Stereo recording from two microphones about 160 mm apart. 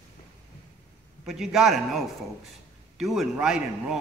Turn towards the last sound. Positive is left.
turn(degrees=-5)  # may be behind; listen again after turning